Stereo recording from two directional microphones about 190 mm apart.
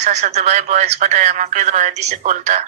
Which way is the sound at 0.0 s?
35° right (ahead or behind).